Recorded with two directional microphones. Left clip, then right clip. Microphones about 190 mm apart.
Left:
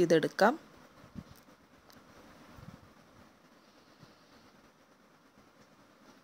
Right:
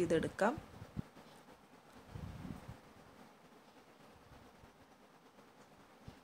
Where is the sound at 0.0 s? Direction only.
35° left (ahead or behind).